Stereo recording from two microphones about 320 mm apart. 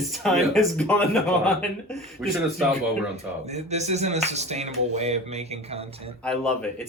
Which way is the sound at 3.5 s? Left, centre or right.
Right.